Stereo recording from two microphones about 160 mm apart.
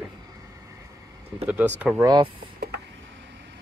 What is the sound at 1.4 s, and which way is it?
Speech, 10° right (ahead or behind).